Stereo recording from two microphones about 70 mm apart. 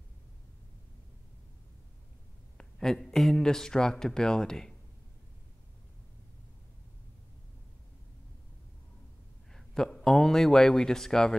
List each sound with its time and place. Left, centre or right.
2.5 s speech: centre
9.5 s speech: centre